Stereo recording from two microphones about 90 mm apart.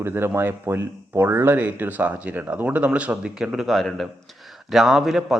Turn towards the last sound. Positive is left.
turn(degrees=-5)  # may be behind; listen again after turning